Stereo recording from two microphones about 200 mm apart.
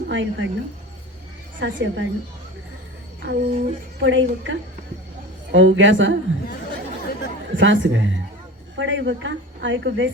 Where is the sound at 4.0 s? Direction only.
65° right (ahead or behind).